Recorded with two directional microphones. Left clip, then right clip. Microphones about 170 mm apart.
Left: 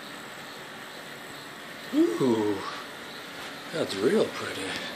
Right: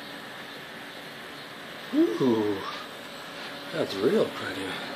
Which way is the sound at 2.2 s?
5° right (ahead or behind).